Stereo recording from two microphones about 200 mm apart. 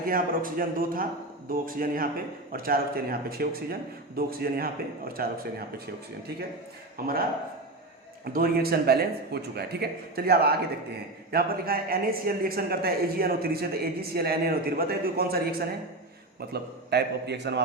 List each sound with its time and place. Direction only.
0.1 s speech: 45° right (ahead or behind)
7.0 s speech: 50° right (ahead or behind)
8.2 s a man's voice: 50° right (ahead or behind)